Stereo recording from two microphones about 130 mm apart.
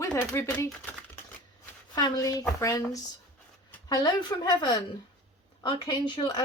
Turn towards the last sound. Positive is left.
turn(degrees=35)  # may be behind; listen again after turning